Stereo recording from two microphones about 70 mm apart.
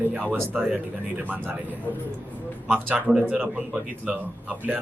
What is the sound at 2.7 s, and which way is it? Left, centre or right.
Speech, right.